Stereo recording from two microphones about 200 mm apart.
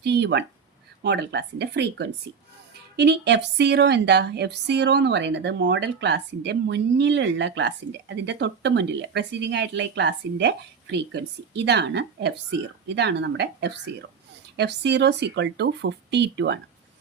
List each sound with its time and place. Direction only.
0.0 s speech: 55° right (ahead or behind)